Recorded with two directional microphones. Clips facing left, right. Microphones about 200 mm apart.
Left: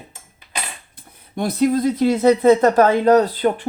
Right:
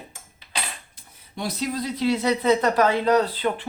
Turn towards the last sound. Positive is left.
turn(degrees=45)  # may be behind; listen again after turning